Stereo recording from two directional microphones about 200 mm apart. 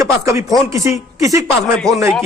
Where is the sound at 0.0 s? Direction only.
15° right (ahead or behind).